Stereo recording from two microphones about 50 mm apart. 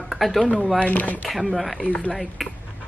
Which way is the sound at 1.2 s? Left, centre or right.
Centre.